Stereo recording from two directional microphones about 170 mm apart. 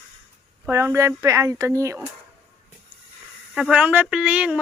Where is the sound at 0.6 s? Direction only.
15° right (ahead or behind).